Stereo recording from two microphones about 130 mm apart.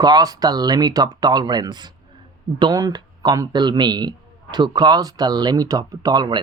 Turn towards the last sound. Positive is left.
turn(degrees=-30)  # may be behind; listen again after turning